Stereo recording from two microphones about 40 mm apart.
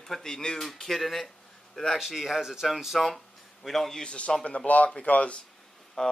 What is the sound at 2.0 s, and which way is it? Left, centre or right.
Speech, centre.